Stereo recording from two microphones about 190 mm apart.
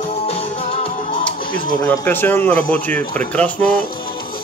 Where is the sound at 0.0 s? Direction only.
35° left (ahead or behind).